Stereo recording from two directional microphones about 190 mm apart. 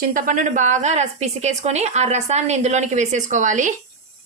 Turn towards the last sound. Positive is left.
turn(degrees=-40)  # may be behind; listen again after turning